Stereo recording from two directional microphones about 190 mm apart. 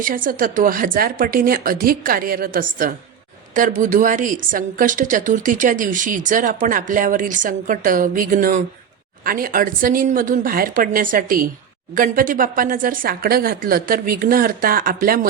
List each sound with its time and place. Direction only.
0.0 s a woman's voice: 45° right (ahead or behind)